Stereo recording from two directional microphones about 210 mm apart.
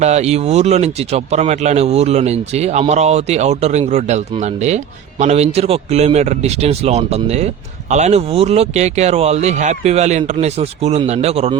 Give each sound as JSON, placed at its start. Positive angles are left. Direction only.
{"t": 0.0, "sound": "speech", "side_deg": -30}